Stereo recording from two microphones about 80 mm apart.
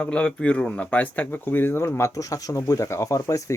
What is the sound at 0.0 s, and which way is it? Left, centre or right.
Speech, centre.